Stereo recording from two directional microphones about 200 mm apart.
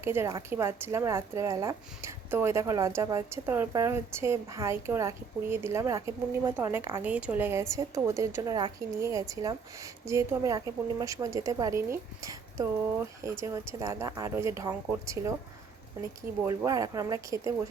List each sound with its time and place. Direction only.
0.0 s a woman's voice: 10° right (ahead or behind)
16.4 s a woman's voice: 15° right (ahead or behind)